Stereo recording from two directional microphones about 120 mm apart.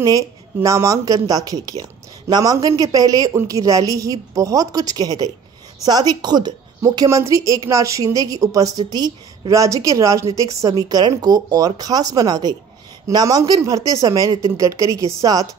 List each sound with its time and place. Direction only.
0.0 s a woman's voice: 25° right (ahead or behind)